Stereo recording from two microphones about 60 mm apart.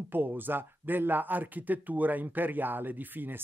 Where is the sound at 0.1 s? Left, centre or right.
Right.